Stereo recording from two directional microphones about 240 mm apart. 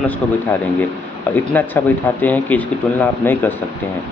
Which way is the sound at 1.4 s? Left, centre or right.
Centre.